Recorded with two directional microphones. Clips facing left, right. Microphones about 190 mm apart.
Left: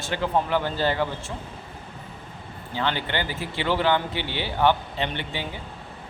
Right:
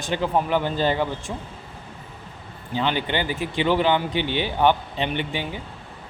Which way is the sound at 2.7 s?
15° right (ahead or behind).